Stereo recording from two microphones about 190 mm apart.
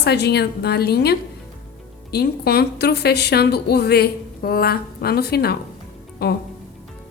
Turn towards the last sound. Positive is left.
turn(degrees=55)  # may be behind; listen again after turning